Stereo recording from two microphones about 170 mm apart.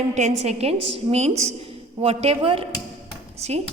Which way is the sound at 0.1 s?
45° right (ahead or behind).